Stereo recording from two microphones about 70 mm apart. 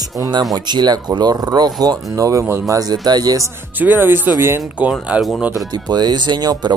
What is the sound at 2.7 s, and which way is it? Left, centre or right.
Speech, right.